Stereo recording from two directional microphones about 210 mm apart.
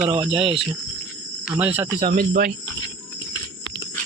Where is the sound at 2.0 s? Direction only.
40° right (ahead or behind).